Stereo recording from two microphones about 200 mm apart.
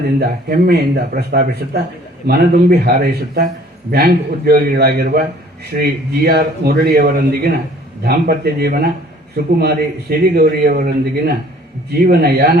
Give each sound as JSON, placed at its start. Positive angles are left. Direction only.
{"t": 0.2, "sound": "a man's voice", "side_deg": -50}